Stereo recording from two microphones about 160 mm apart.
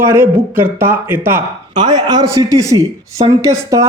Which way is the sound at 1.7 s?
25° right (ahead or behind).